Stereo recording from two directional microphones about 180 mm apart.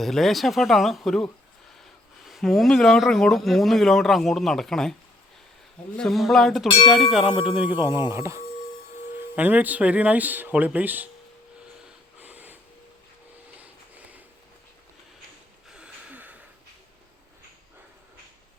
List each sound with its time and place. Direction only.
0.0 s speech: centre (ahead or behind)
6.0 s speech: centre (ahead or behind)
12.2 s a sound: 10° right (ahead or behind)
15.7 s gasp: 5° right (ahead or behind)